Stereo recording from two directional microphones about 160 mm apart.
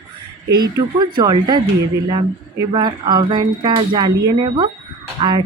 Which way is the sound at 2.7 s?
30° right (ahead or behind).